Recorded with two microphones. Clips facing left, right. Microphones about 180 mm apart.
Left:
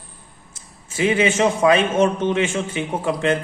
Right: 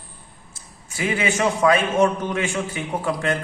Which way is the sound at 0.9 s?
25° left (ahead or behind).